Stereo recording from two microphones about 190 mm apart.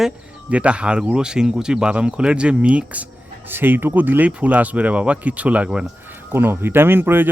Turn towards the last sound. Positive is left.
turn(degrees=-10)  # may be behind; listen again after turning